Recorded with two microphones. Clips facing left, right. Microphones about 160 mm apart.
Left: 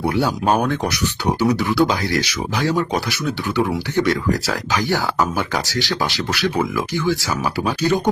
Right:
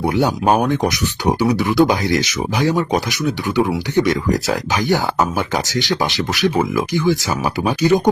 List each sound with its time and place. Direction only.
0.0 s speech: 20° right (ahead or behind)